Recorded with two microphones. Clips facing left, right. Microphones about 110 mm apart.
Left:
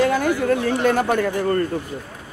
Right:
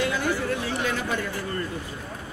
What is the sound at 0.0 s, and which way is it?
Chatter, 50° left (ahead or behind).